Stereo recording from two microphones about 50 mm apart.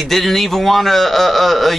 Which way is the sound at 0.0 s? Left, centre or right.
Centre.